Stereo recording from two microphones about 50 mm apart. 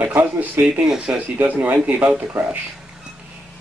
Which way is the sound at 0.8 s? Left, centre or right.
Centre.